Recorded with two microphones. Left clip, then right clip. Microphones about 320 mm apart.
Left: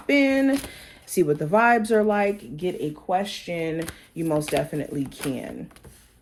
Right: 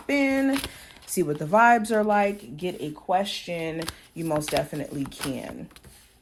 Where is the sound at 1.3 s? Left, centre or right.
Right.